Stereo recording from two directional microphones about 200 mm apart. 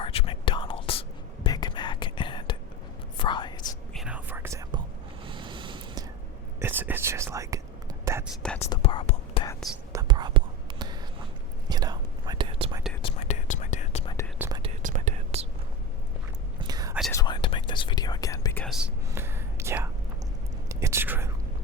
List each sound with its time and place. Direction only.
0.0 s whispering: 30° left (ahead or behind)
3.9 s whispering: 5° right (ahead or behind)
5.2 s snort: 25° right (ahead or behind)
6.6 s whispering: 10° right (ahead or behind)
8.4 s whispering: 5° left (ahead or behind)
8.7 s whispering: 25° left (ahead or behind)
9.9 s whispering: 20° right (ahead or behind)
13.0 s whispering: 30° left (ahead or behind)
14.3 s whispering: 10° right (ahead or behind)
14.8 s whispering: 40° right (ahead or behind)
16.6 s whispering: 20° right (ahead or behind)
17.1 s whispering: 20° left (ahead or behind)
18.6 s whispering: centre (ahead or behind)
19.1 s whispering: 10° right (ahead or behind)